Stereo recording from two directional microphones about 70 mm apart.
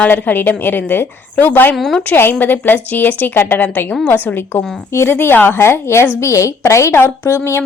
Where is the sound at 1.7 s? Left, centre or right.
Centre.